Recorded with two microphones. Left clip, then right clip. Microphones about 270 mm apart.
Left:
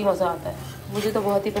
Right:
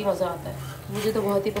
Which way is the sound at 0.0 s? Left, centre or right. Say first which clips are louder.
Left 3 dB; centre.